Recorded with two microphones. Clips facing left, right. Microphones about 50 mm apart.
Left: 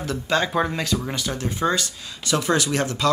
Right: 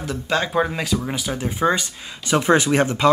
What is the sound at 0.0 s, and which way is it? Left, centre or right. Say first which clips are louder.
Speech: even; centre.